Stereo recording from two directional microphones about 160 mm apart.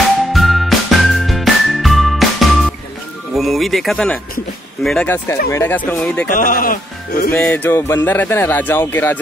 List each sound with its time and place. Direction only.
0.3 s music: centre (ahead or behind)
3.3 s speech: centre (ahead or behind)
6.3 s music: 60° left (ahead or behind)
7.3 s speech: 10° left (ahead or behind)